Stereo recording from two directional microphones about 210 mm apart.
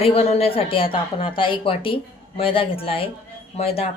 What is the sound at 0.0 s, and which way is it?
Speech, 30° left (ahead or behind).